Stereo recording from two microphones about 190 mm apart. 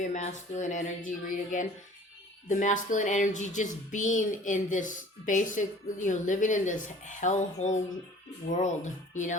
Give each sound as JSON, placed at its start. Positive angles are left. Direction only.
{"t": 0.0, "sound": "speech", "side_deg": 40}